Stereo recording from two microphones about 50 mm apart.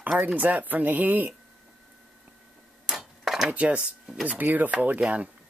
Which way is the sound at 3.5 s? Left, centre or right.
Right.